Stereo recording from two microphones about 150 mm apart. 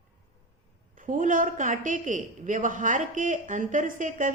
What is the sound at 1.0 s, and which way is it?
A woman's voice, 60° right (ahead or behind).